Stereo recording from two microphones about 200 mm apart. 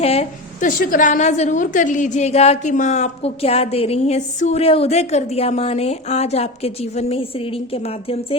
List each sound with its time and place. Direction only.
0.0 s a woman's voice: 30° left (ahead or behind)